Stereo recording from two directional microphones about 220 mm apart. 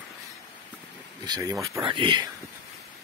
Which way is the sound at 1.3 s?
15° right (ahead or behind).